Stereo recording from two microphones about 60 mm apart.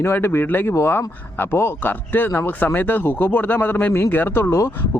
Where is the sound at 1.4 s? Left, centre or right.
Left.